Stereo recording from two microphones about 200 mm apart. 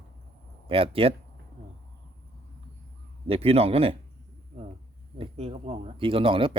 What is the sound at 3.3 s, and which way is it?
Speech, 30° right (ahead or behind).